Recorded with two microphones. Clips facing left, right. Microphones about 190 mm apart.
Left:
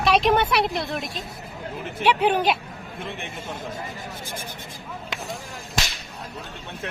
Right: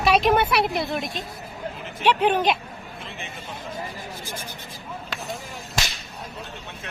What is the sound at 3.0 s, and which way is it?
Speech, 55° left (ahead or behind).